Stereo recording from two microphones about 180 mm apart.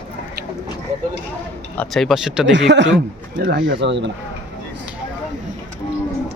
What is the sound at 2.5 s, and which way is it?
Speech, 80° right.